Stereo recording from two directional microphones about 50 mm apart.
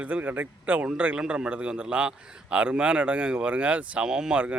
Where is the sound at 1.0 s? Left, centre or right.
Right.